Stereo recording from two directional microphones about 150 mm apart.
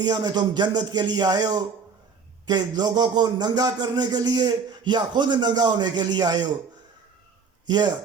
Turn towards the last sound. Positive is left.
turn(degrees=-30)  # may be behind; listen again after turning